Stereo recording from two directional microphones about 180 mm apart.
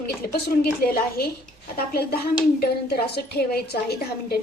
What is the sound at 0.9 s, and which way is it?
Speech, 60° left (ahead or behind).